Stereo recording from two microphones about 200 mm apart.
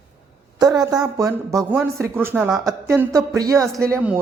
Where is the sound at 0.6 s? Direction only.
20° right (ahead or behind).